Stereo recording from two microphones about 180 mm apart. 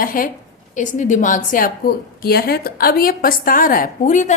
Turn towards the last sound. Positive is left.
turn(degrees=45)  # may be behind; listen again after turning